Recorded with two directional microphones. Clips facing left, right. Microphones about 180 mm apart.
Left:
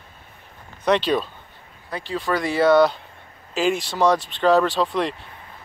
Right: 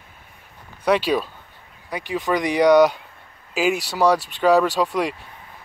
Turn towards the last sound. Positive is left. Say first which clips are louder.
# right 1 dB
turn(degrees=-10)  # may be behind; listen again after turning